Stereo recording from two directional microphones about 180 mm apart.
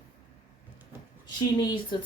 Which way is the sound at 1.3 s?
25° left (ahead or behind).